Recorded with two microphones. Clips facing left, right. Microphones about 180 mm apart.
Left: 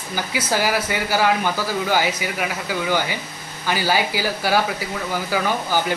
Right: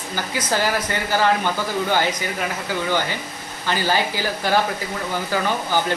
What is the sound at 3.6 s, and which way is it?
Speech, 10° left (ahead or behind).